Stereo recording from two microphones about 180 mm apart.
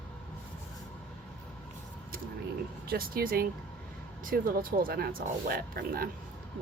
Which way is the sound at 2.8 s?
55° right (ahead or behind).